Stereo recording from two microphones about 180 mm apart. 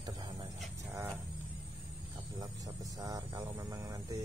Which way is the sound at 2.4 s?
20° right (ahead or behind).